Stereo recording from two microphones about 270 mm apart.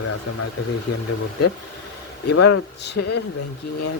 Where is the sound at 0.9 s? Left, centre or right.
Left.